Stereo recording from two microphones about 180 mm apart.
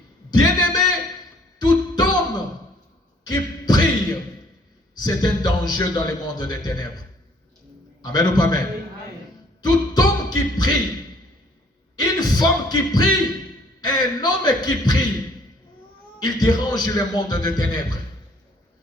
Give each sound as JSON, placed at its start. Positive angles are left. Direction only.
{"t": 0.3, "sound": "a sound", "side_deg": 20}
{"t": 1.5, "sound": "music", "side_deg": 20}
{"t": 3.2, "sound": "a sound", "side_deg": 20}
{"t": 5.0, "sound": "speech", "side_deg": 20}
{"t": 8.0, "sound": "speech", "side_deg": 20}
{"t": 9.6, "sound": "speech", "side_deg": 20}
{"t": 11.9, "sound": "speech", "side_deg": 20}
{"t": 16.2, "sound": "speech", "side_deg": 25}